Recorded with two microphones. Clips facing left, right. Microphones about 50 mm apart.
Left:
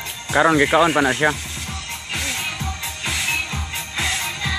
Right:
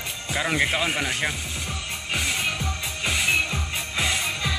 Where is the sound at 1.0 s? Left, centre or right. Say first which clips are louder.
Left 9 dB; left.